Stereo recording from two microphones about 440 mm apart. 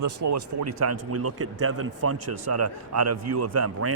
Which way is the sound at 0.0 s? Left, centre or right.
Right.